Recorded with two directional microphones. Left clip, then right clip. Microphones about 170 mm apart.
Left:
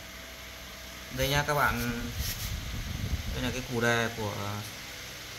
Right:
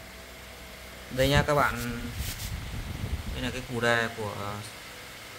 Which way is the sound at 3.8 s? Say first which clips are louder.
Right 2 dB; 45° right (ahead or behind).